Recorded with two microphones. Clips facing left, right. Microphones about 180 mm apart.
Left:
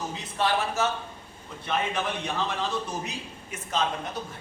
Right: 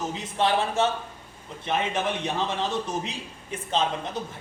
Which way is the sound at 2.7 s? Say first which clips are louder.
Right 2 dB; 25° right (ahead or behind).